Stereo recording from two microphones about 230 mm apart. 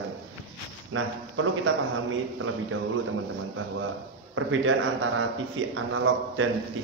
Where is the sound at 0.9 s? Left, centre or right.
Right.